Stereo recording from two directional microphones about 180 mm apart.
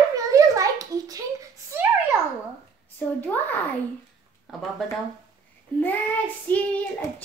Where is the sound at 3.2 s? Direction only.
10° left (ahead or behind).